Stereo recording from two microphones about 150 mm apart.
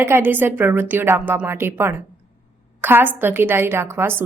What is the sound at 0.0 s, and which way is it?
A woman's voice, 15° right (ahead or behind).